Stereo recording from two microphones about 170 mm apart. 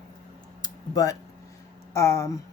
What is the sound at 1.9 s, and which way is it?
Speech, 15° left (ahead or behind).